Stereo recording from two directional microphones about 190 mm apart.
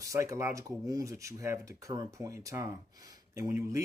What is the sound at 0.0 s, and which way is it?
Speech, 15° right (ahead or behind).